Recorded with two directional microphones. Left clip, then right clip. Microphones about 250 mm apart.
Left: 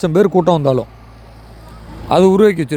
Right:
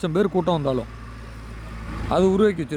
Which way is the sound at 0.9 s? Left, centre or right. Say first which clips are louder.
Even; right.